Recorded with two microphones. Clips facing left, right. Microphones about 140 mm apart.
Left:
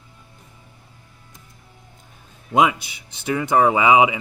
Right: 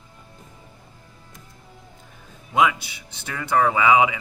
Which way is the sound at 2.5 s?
20° left (ahead or behind).